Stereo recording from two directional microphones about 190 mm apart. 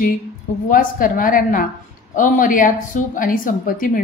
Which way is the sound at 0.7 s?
45° left (ahead or behind).